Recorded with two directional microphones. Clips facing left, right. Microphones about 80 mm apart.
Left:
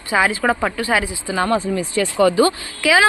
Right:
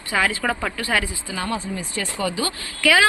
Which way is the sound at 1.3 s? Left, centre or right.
Left.